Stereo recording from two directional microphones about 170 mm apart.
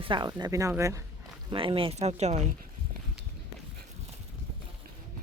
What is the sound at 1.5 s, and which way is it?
Speech, 30° right (ahead or behind).